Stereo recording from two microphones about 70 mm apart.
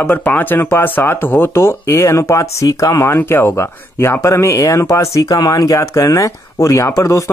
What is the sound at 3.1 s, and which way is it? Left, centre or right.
Speech, left.